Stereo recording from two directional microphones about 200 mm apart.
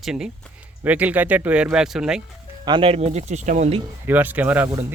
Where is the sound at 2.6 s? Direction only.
25° right (ahead or behind).